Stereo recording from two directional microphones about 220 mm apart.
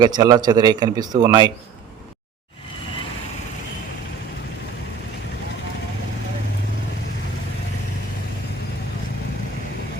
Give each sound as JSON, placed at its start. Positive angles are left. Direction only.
{"t": 0.0, "sound": "speech", "side_deg": -20}